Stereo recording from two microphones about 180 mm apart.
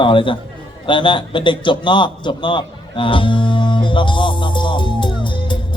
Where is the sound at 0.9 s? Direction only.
25° left (ahead or behind).